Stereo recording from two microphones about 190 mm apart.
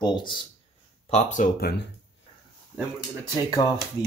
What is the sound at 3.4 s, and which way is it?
Speech, 20° left (ahead or behind).